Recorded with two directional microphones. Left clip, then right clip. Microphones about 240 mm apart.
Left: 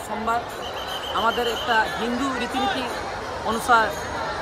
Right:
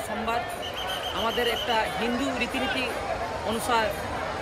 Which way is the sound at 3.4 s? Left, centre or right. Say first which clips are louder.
Left 7 dB; centre.